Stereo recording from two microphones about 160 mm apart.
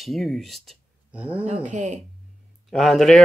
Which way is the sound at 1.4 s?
50° right (ahead or behind).